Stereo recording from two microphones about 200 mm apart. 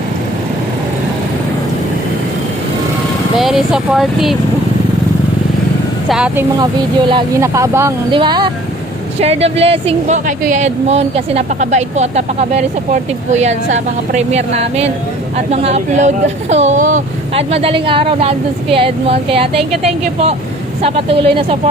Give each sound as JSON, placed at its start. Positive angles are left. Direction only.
{"t": 3.3, "sound": "speech", "side_deg": 0}
{"t": 6.1, "sound": "speech", "side_deg": -5}
{"t": 7.1, "sound": "speech", "side_deg": -20}
{"t": 20.8, "sound": "speech", "side_deg": -30}